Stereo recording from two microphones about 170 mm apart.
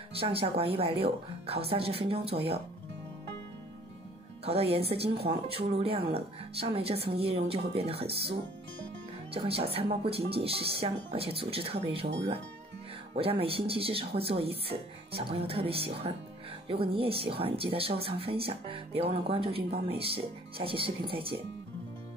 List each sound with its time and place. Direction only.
0.1 s speech: 35° right (ahead or behind)
4.5 s speech: 35° right (ahead or behind)
13.1 s speech: 35° right (ahead or behind)